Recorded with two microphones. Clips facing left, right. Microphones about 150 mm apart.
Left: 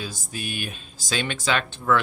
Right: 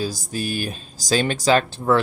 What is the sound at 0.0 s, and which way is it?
Speech, 35° right (ahead or behind).